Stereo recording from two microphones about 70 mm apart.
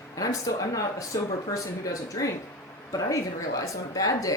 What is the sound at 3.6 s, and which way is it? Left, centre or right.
Speech, left.